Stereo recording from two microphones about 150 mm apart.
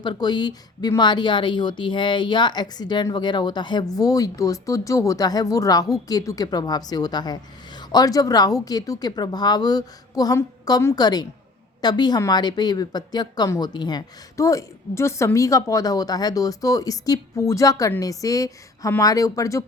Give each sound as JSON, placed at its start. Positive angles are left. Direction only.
{"t": 0.0, "sound": "a woman's voice", "side_deg": 30}